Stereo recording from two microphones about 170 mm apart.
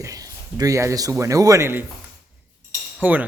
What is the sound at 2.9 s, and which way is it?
Speech, 10° right (ahead or behind).